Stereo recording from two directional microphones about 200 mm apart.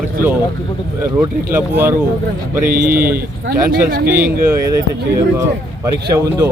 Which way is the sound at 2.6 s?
45° right (ahead or behind).